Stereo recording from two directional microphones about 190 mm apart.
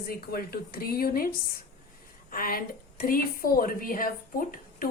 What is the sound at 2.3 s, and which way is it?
Speech, 50° left (ahead or behind).